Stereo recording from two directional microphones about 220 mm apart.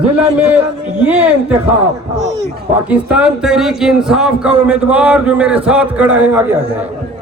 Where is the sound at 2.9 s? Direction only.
5° right (ahead or behind).